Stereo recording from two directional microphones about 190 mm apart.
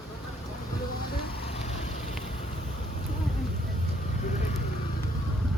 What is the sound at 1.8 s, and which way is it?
Vehicle, 35° left (ahead or behind).